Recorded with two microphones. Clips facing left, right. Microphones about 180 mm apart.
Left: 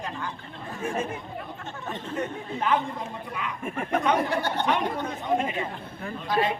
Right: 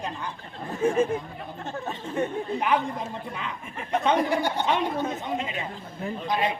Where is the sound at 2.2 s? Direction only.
15° right (ahead or behind).